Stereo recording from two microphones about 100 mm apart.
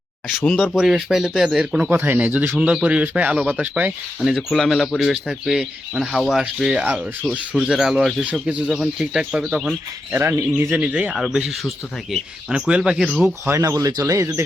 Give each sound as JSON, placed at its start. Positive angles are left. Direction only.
{"t": 0.5, "sound": "speech", "side_deg": -5}
{"t": 1.9, "sound": "speech", "side_deg": -20}
{"t": 4.2, "sound": "speech", "side_deg": 0}
{"t": 6.8, "sound": "speech", "side_deg": -20}
{"t": 7.3, "sound": "speech", "side_deg": -5}
{"t": 10.1, "sound": "speech", "side_deg": -25}
{"t": 13.6, "sound": "speech", "side_deg": -35}